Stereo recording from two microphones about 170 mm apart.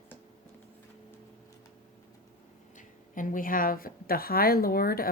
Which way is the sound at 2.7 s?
50° left (ahead or behind).